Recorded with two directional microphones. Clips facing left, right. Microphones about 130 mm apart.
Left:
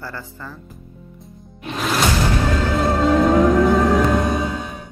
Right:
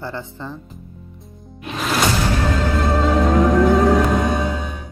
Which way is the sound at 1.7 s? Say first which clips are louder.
Even; centre (ahead or behind).